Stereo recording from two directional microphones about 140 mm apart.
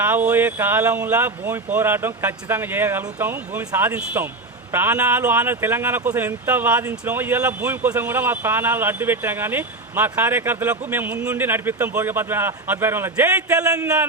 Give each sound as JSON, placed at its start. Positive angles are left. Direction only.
{"t": 0.0, "sound": "a man's voice", "side_deg": -15}